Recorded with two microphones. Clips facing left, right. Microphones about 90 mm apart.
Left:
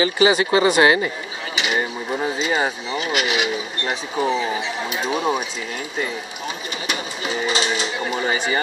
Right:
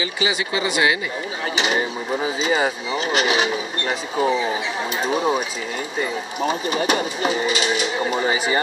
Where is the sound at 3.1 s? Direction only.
35° right (ahead or behind).